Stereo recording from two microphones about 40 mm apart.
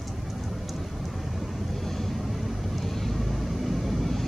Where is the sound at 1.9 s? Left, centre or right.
Centre.